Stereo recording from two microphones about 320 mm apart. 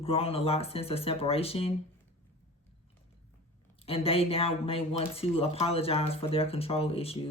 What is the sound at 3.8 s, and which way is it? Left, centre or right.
Speech, centre.